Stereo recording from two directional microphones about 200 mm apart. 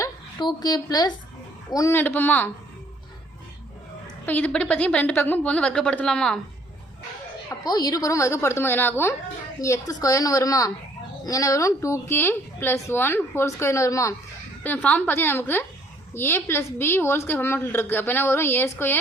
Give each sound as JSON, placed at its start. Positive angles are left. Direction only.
{"t": 0.0, "sound": "a woman's voice", "side_deg": 20}
{"t": 4.3, "sound": "a woman's voice", "side_deg": 10}
{"t": 7.6, "sound": "a woman's voice", "side_deg": 20}